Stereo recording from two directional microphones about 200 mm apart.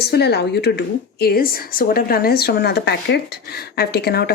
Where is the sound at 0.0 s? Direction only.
55° left (ahead or behind).